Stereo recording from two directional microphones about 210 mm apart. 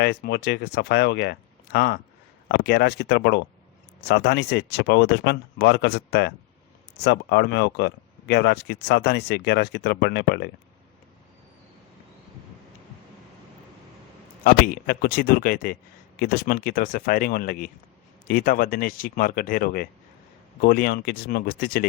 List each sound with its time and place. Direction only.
0.0 s speech: 50° left (ahead or behind)
14.4 s speech: 45° left (ahead or behind)